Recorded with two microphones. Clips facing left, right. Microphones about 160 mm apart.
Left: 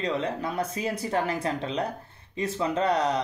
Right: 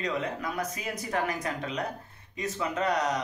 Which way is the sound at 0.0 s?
30° left (ahead or behind).